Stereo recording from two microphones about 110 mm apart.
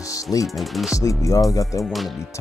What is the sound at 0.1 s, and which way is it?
Music, 30° left (ahead or behind).